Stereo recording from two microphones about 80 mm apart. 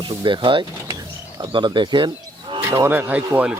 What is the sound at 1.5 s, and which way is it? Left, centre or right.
Livestock, right.